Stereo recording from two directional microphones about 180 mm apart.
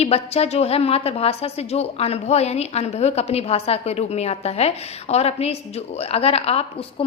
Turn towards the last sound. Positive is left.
turn(degrees=30)  # may be behind; listen again after turning